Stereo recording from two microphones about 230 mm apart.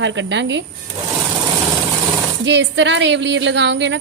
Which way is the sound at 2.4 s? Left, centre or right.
Right.